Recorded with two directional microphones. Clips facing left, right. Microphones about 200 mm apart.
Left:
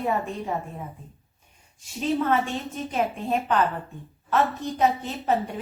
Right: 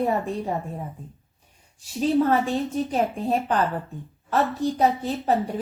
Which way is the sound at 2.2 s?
35° right (ahead or behind).